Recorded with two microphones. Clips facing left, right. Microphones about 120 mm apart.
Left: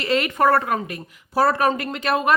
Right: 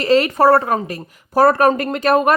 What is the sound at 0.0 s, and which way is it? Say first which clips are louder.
A woman's voice: right 6 dB; 35° right (ahead or behind).